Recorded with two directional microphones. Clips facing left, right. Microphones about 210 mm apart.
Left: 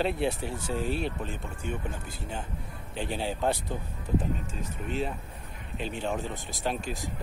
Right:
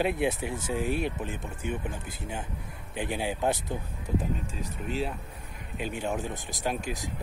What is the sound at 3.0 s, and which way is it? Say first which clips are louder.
Speech: right 1 dB; 15° right (ahead or behind).